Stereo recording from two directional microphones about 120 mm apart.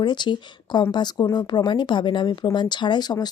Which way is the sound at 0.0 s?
40° left (ahead or behind).